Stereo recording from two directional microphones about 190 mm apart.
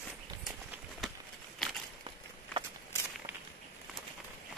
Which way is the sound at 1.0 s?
Centre (ahead or behind).